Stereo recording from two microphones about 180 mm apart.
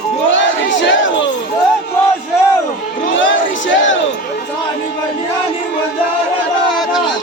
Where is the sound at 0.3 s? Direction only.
90° left.